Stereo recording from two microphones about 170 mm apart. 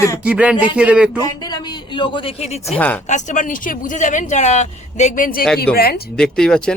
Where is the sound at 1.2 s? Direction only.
25° left (ahead or behind).